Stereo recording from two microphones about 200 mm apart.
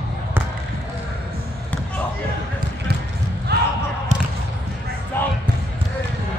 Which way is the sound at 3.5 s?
55° right (ahead or behind).